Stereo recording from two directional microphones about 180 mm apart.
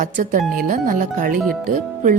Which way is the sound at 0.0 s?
45° right (ahead or behind).